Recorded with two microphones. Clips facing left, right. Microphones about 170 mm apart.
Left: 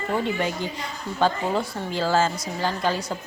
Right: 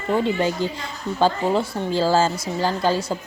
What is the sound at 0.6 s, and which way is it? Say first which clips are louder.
A woman's voice: right 4 dB; 30° right (ahead or behind).